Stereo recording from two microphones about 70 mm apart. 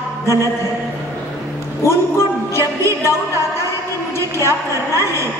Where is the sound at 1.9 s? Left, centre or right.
Left.